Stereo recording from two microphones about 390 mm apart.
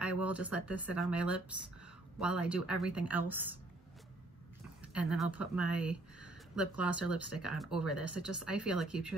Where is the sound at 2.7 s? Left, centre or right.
Centre.